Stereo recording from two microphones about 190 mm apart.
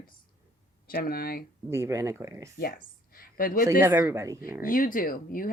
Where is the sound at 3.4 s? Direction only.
45° left (ahead or behind).